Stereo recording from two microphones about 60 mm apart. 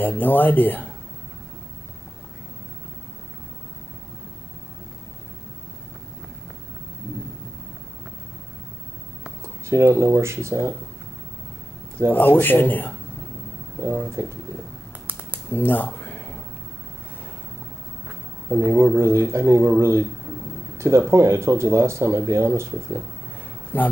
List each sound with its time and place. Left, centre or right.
0.0 s speech: left
9.7 s speech: right
12.1 s speech: left
13.7 s speech: right
15.0 s finger snapping: right
15.5 s a sound: left
18.5 s speech: right
20.7 s a sound: right
21.1 s speech: right
23.7 s speech: left